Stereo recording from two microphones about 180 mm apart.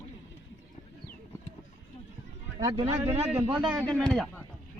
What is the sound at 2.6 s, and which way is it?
Speech, 20° right (ahead or behind).